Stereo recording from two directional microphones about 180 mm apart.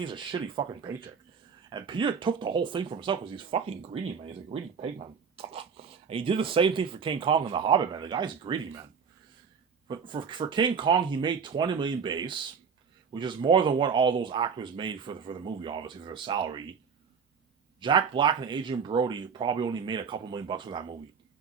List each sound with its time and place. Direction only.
0.0 s speech: 25° right (ahead or behind)
9.9 s speech: 25° right (ahead or behind)
17.7 s speech: 25° right (ahead or behind)